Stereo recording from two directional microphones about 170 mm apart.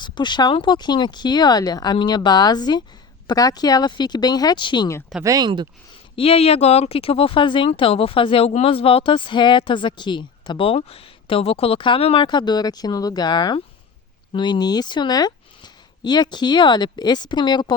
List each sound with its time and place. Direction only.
0.0 s speech: 25° left (ahead or behind)
5.2 s speech: 20° right (ahead or behind)
6.1 s speech: 35° left (ahead or behind)